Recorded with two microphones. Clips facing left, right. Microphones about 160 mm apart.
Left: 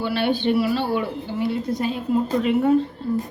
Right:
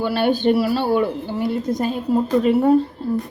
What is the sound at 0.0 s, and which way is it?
A woman's voice, 45° right (ahead or behind).